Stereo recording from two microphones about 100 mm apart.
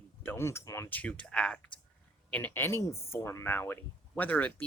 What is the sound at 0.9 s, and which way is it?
Speech, 15° left (ahead or behind).